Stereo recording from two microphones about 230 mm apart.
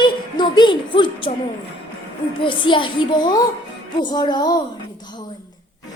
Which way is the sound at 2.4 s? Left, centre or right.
Left.